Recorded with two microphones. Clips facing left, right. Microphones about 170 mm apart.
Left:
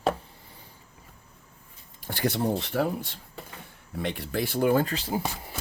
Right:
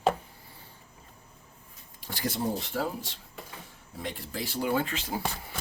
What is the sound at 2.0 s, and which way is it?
Speech, 55° left (ahead or behind).